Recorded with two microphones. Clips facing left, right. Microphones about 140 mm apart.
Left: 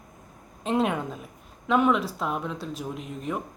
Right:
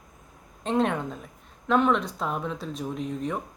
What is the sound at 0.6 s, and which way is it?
A woman's voice, 5° left (ahead or behind).